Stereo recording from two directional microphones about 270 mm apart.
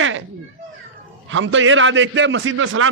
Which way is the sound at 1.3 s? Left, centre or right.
Right.